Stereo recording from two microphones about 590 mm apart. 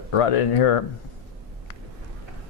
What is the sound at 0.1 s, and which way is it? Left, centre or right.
Speech, left.